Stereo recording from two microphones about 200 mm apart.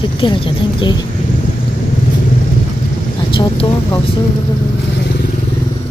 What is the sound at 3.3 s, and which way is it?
Speech, 25° left (ahead or behind).